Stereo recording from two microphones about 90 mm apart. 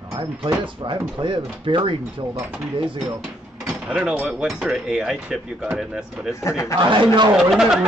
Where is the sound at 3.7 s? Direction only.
15° right (ahead or behind).